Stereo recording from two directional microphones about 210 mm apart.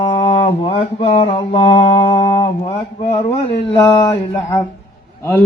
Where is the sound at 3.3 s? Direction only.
25° left (ahead or behind).